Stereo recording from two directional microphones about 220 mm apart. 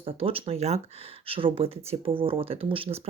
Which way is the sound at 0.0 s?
25° right (ahead or behind).